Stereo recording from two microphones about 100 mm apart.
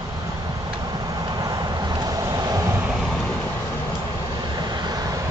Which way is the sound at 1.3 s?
40° right (ahead or behind).